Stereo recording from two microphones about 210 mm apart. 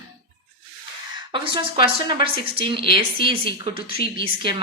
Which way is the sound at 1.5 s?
20° right (ahead or behind).